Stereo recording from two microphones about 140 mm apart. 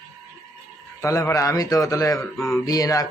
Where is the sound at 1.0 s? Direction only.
20° left (ahead or behind).